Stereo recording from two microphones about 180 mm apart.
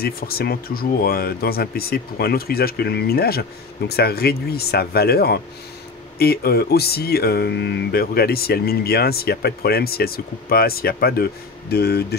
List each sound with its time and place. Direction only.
0.0 s speech: 60° left (ahead or behind)